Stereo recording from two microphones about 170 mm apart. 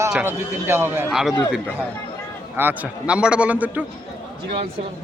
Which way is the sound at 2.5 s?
10° right (ahead or behind).